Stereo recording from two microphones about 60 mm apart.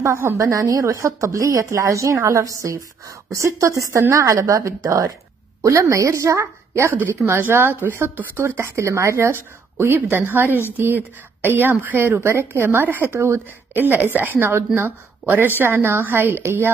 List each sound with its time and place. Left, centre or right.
0.0 s speech: right
0.4 s a woman's voice: right